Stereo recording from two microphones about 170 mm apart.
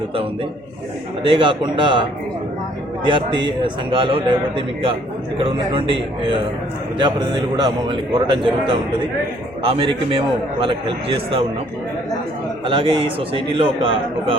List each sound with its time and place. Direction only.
1.2 s a man's voice: 30° right (ahead or behind)
12.6 s a man's voice: 30° right (ahead or behind)